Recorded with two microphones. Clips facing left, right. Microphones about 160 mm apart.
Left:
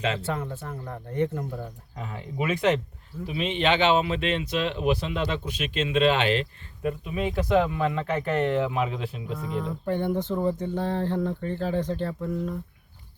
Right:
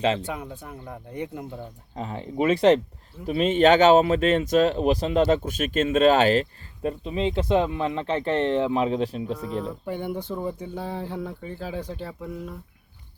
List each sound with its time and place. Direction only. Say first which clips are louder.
0.2 s speech: left 2 dB; 15° right (ahead or behind)
2.0 s speech: right 5 dB; 30° right (ahead or behind)
3.2 s speech: right 7 dB; 45° right (ahead or behind)
9.8 s speech: left 4 dB; 10° right (ahead or behind)